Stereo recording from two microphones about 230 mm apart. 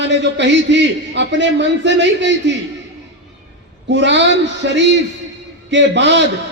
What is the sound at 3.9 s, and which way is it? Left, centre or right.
A man's voice, right.